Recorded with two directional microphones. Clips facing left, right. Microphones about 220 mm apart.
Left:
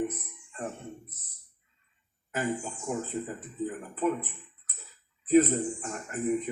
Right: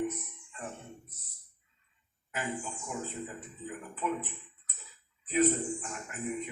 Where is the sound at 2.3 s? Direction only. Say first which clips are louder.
Left 6 dB; 45° left (ahead or behind).